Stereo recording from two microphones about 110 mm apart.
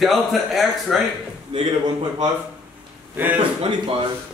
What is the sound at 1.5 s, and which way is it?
Speech, 45° right (ahead or behind).